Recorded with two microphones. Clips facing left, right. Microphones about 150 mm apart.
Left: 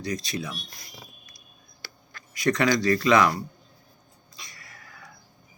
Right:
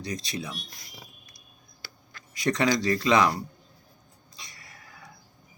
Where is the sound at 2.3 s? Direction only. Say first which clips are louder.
Left 2 dB; 25° right (ahead or behind).